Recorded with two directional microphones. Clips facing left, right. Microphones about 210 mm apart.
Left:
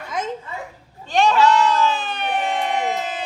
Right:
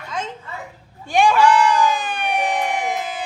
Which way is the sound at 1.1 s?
10° right (ahead or behind).